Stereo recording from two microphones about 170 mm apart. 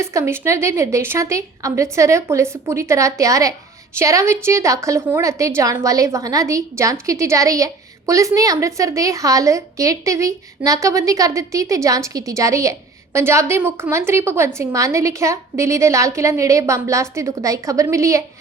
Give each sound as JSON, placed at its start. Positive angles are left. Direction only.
{"t": 0.0, "sound": "a woman's voice", "side_deg": -15}